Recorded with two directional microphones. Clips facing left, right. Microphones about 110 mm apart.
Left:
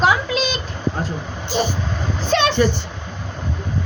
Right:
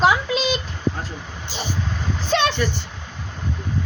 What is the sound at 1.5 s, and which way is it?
Vehicle, 50° left (ahead or behind).